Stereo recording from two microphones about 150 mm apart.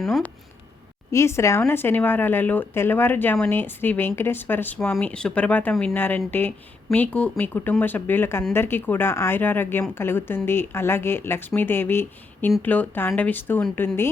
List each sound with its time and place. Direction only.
0.0 s speech: centre (ahead or behind)
1.1 s speech: 20° left (ahead or behind)